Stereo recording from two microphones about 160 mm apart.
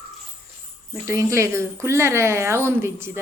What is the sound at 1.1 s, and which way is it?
A child's voice, 20° right (ahead or behind).